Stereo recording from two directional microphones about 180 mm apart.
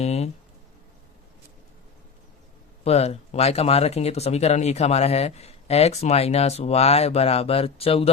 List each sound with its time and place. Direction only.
0.0 s speech: 35° left (ahead or behind)
2.8 s speech: 35° left (ahead or behind)